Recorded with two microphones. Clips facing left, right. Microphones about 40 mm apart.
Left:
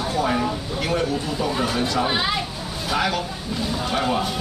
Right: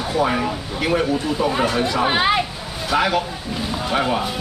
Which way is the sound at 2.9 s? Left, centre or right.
Centre.